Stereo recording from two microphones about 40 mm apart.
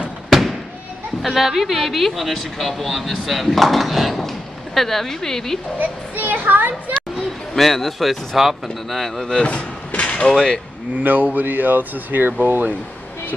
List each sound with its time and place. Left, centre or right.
0.3 s fireworks: centre
1.2 s speech: centre
5.8 s a child's voice: right
7.5 s speech: centre
9.4 s a sound: left
10.2 s speech: centre
11.1 s speech: right